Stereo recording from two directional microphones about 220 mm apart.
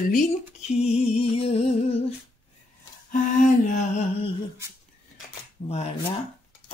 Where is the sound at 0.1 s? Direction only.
35° left (ahead or behind).